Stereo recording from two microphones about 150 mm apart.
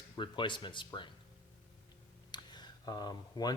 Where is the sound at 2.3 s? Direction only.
30° left (ahead or behind).